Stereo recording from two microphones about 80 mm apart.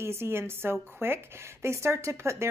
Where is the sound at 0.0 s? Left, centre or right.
Right.